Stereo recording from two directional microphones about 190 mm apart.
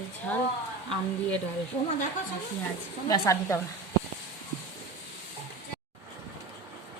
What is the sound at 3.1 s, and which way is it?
Speech, 15° left (ahead or behind).